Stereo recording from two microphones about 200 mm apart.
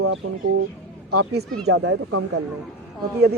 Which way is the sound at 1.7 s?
90° right.